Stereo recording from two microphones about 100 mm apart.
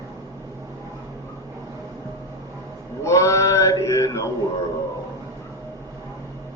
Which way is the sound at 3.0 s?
30° left (ahead or behind).